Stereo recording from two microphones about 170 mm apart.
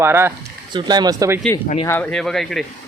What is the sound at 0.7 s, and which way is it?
Speech, 25° right (ahead or behind).